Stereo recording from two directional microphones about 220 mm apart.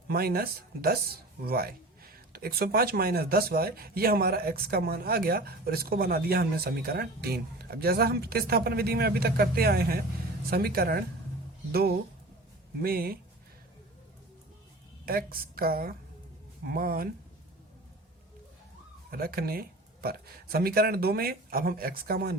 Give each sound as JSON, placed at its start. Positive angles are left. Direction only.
{"t": 0.1, "sound": "speech", "side_deg": -45}
{"t": 15.0, "sound": "a woman's voice", "side_deg": -40}
{"t": 19.1, "sound": "speech", "side_deg": -45}